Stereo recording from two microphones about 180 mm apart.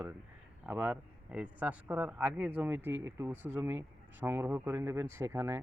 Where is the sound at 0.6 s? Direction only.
10° right (ahead or behind).